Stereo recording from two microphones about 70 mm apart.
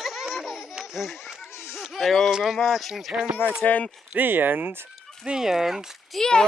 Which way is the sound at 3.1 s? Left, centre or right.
Centre.